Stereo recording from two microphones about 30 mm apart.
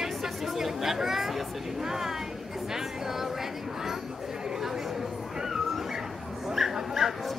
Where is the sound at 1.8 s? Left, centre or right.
Centre.